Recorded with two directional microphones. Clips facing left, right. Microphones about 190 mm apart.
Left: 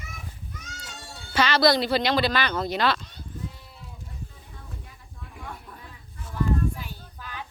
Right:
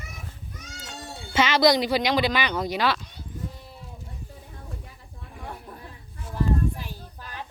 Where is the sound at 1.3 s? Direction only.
20° right (ahead or behind).